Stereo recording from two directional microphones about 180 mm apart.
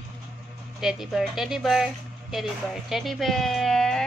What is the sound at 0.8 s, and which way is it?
Speech, centre (ahead or behind).